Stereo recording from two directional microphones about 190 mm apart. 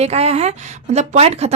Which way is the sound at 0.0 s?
35° right (ahead or behind).